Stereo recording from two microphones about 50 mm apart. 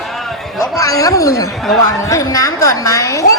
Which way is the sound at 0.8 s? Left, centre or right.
Left.